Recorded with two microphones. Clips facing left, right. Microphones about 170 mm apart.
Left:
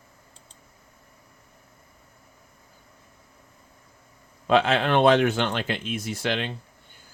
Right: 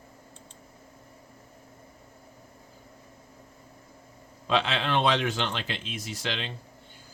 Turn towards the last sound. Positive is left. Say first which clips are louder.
# left 6 dB
turn(degrees=55)  # may be behind; listen again after turning